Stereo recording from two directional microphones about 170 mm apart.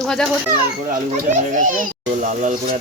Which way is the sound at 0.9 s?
50° right (ahead or behind).